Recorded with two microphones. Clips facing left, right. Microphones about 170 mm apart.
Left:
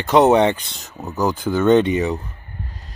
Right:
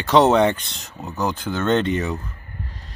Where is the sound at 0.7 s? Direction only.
5° left (ahead or behind).